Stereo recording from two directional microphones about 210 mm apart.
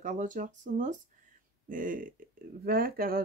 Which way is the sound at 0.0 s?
35° right (ahead or behind).